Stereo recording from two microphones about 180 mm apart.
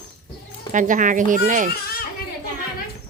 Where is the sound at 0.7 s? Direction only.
45° right (ahead or behind).